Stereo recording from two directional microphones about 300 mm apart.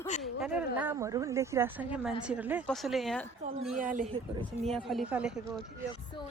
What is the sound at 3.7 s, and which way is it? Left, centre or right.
Speech, right.